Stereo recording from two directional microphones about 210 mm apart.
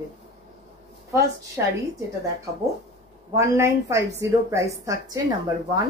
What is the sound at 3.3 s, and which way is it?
A woman's voice, 15° right (ahead or behind).